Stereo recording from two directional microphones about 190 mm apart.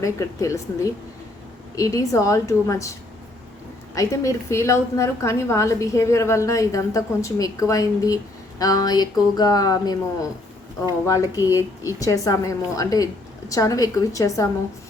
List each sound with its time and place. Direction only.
0.0 s a woman's voice: 15° left (ahead or behind)
1.7 s a woman's voice: 15° left (ahead or behind)
3.9 s a woman's voice: 15° left (ahead or behind)
11.0 s a woman's voice: 15° left (ahead or behind)